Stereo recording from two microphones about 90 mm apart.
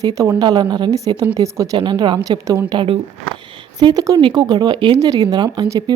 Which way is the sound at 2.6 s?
65° right (ahead or behind).